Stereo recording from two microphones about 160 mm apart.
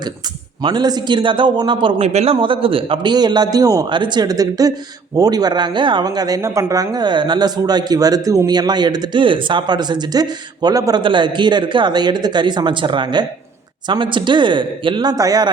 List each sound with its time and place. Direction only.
0.6 s a man's voice: 25° right (ahead or behind)